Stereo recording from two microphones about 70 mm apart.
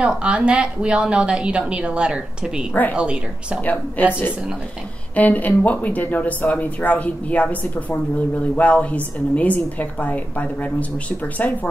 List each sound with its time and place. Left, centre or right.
0.0 s a woman's voice: centre
2.7 s a woman's voice: left
3.0 s a woman's voice: centre
3.6 s a woman's voice: left